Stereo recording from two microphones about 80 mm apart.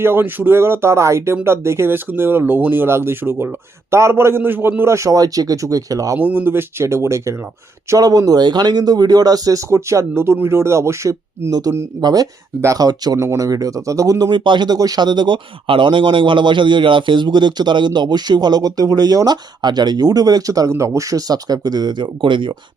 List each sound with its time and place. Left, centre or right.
0.0 s speech: right
4.8 s speech: right
6.1 s speech: right
7.9 s speech: right
11.9 s speech: right
13.1 s speech: right
14.2 s speech: right